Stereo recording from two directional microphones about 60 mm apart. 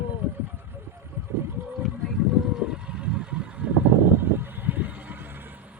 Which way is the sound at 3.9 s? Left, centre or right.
Right.